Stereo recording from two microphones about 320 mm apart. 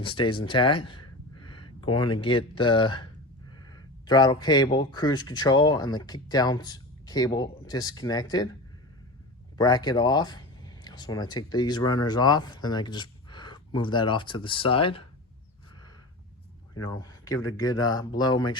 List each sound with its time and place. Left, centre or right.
0.0 s a sound: centre
2.0 s speech: centre
9.6 s speech: centre
16.8 s speech: centre